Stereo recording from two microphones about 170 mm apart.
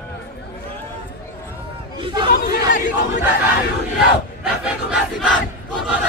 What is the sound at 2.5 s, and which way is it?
Crowd, 50° left (ahead or behind).